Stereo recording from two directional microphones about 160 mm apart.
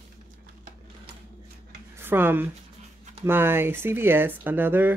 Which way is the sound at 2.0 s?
15° right (ahead or behind).